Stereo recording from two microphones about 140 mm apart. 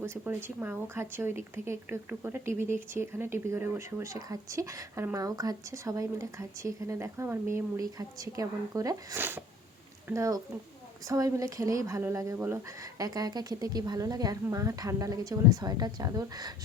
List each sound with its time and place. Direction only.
0.0 s speech: 15° right (ahead or behind)